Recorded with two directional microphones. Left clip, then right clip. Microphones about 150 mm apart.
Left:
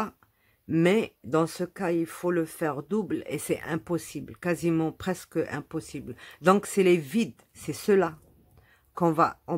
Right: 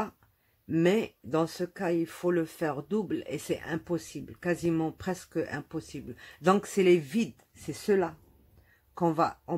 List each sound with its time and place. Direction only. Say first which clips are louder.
0.7 s speech: left 3 dB; 20° left (ahead or behind)